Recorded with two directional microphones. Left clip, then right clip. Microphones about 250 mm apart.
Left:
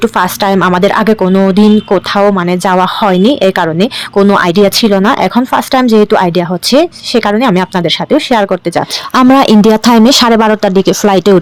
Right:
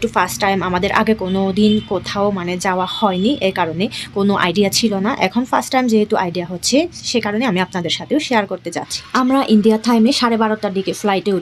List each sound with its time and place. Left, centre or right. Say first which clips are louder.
0.0 s speech: left 6 dB; left
9.1 s speech: left 9 dB; left